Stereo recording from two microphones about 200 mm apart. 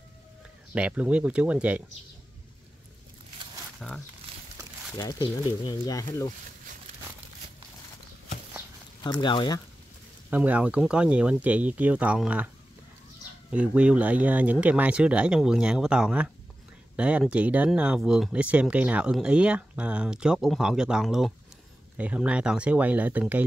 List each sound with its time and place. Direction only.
0.7 s speech: 5° right (ahead or behind)
3.8 s speech: centre (ahead or behind)
4.9 s speech: 20° left (ahead or behind)
9.0 s speech: 25° left (ahead or behind)
10.3 s speech: 5° right (ahead or behind)
13.5 s speech: 5° right (ahead or behind)